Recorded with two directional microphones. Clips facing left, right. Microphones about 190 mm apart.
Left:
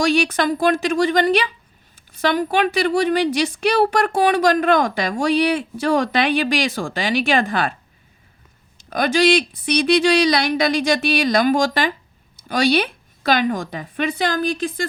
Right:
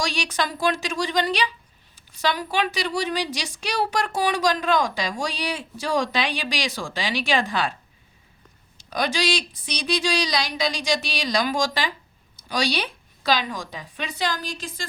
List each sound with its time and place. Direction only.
0.0 s a woman's voice: 55° left (ahead or behind)
8.8 s a woman's voice: 55° left (ahead or behind)